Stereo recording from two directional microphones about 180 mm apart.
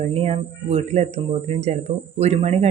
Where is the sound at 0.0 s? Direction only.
35° right (ahead or behind).